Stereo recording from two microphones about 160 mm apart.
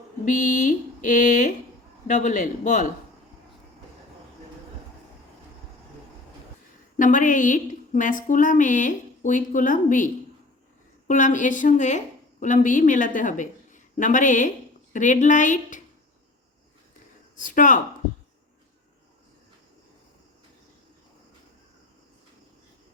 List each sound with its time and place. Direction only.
0.3 s a woman's voice: 50° left (ahead or behind)
6.9 s a woman's voice: 55° left (ahead or behind)
11.1 s a woman's voice: 55° left (ahead or behind)
17.4 s speech: 55° left (ahead or behind)